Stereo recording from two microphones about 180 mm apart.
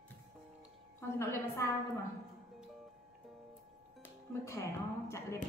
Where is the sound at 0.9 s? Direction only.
15° left (ahead or behind).